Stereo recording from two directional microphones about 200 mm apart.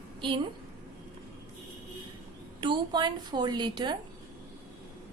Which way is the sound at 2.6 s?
20° right (ahead or behind).